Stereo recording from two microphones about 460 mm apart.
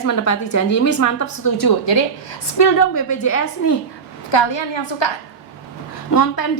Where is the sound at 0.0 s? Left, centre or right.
Left.